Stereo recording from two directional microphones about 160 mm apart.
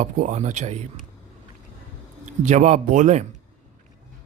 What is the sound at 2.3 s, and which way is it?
Speech, 50° right (ahead or behind).